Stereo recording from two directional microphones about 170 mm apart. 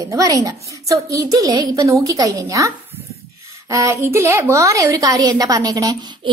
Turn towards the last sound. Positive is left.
turn(degrees=-20)  # may be behind; listen again after turning